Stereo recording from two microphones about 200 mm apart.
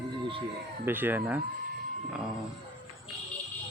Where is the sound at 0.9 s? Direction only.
10° right (ahead or behind).